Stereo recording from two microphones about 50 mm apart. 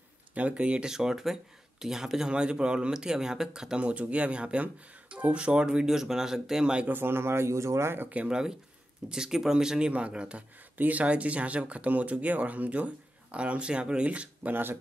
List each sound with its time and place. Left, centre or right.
0.3 s speech: right
3.8 s speech: right
6.9 s speech: right
8.3 s speech: centre
14.5 s speech: right